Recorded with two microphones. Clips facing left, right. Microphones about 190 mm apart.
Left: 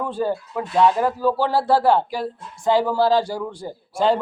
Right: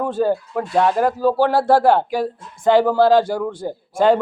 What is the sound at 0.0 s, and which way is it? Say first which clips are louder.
Speech: right 5 dB; 50° right (ahead or behind).